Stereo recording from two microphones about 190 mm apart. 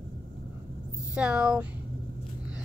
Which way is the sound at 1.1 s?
5° right (ahead or behind).